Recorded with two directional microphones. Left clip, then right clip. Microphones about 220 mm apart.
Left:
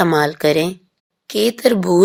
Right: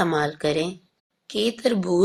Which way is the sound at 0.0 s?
40° left (ahead or behind).